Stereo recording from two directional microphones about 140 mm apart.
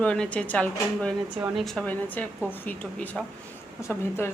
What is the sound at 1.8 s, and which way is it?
A woman's voice, 10° left (ahead or behind).